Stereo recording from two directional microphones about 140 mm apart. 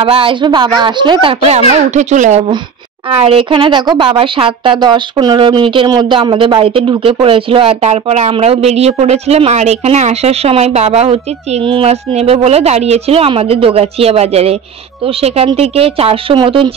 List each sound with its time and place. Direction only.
0.0 s speech: 40° right (ahead or behind); by 2.4 s 60° right (ahead or behind)
3.2 s a woman's voice: 40° right (ahead or behind)